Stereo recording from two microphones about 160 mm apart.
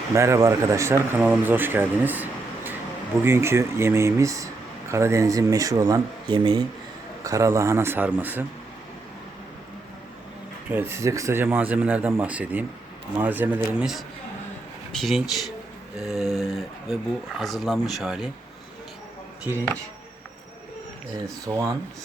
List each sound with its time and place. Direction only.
0.1 s speech: 20° right (ahead or behind)
10.7 s speech: 15° right (ahead or behind)
21.4 s speech: 20° right (ahead or behind)